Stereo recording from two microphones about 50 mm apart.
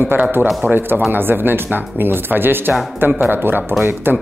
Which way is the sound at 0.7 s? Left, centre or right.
Right.